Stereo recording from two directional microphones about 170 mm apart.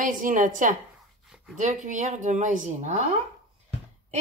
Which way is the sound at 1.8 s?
45° right (ahead or behind).